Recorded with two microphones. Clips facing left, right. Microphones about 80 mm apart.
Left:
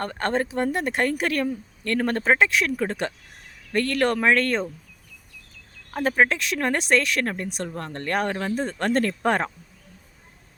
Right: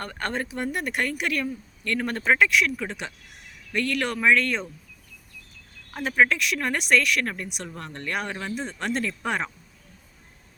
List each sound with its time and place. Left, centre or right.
0.0 s speech: left
5.9 s speech: left